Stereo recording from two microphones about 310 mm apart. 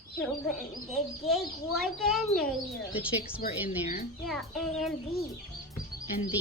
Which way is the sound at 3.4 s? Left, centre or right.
Left.